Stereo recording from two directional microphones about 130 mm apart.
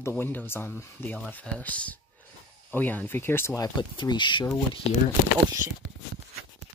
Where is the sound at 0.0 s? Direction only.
15° left (ahead or behind); by 4.6 s 35° left (ahead or behind).